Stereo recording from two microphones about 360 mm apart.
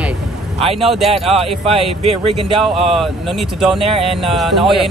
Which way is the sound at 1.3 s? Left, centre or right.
Centre.